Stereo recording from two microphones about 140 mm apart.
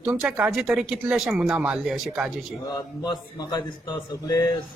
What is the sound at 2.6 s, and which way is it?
A man's voice, 25° left (ahead or behind).